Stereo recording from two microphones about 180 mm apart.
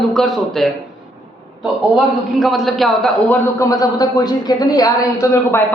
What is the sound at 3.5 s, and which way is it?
A man's voice, 20° left (ahead or behind).